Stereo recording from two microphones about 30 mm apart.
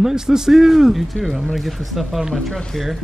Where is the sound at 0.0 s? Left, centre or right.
Centre.